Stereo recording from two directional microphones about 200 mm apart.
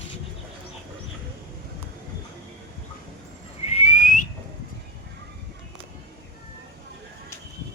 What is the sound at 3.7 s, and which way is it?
Whistling, 35° left (ahead or behind).